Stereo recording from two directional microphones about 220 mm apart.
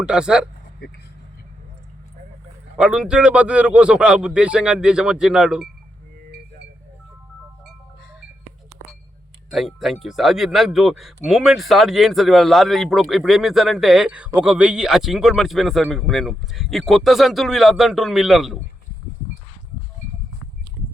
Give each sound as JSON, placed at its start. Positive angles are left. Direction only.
{"t": 0.0, "sound": "speech", "side_deg": -5}
{"t": 2.7, "sound": "speech", "side_deg": -5}
{"t": 9.5, "sound": "speech", "side_deg": 0}